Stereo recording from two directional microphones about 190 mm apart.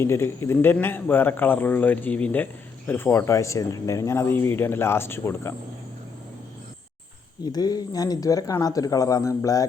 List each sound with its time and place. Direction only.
0.0 s a man's voice: 15° left (ahead or behind)
7.4 s speech: 20° left (ahead or behind)